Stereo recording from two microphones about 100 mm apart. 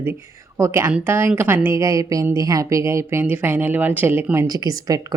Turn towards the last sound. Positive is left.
turn(degrees=-35)  # may be behind; listen again after turning